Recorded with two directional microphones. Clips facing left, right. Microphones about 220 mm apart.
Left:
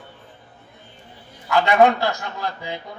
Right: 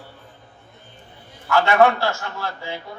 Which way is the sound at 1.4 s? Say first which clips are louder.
Even; 15° left (ahead or behind).